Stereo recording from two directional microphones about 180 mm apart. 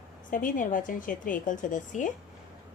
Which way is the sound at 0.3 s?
50° left (ahead or behind).